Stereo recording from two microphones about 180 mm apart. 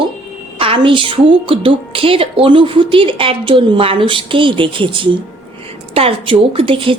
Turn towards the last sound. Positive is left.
turn(degrees=-30)  # may be behind; listen again after turning